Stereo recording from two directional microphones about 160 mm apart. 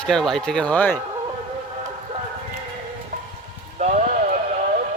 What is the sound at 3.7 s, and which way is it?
Music, 50° right (ahead or behind).